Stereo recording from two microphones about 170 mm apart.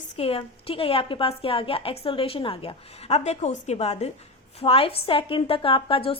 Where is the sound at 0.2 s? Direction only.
35° left (ahead or behind).